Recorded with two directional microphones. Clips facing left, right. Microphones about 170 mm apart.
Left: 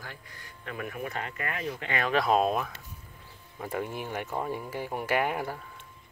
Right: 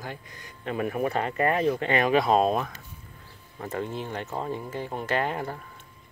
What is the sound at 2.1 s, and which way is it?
Speech, centre (ahead or behind).